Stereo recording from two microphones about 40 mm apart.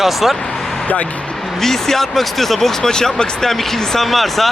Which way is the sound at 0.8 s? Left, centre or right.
Left.